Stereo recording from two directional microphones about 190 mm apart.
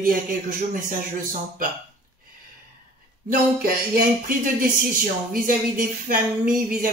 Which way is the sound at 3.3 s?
50° right (ahead or behind).